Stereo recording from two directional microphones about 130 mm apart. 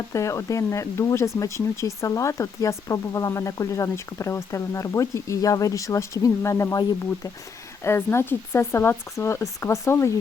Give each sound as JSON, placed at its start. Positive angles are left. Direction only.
{"t": 0.1, "sound": "speech", "side_deg": 25}